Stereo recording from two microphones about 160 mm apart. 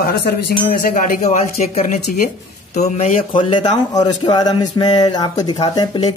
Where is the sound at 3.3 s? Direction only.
30° left (ahead or behind).